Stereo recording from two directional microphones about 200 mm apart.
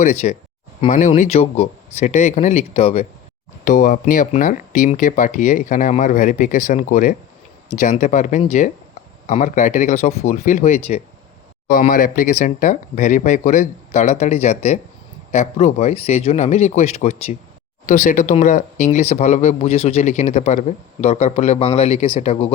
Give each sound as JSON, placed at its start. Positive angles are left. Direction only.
{"t": 0.0, "sound": "speech", "side_deg": 35}
{"t": 3.6, "sound": "speech", "side_deg": 40}
{"t": 11.7, "sound": "speech", "side_deg": 40}